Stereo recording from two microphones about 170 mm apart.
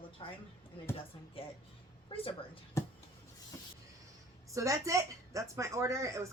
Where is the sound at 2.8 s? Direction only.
15° left (ahead or behind).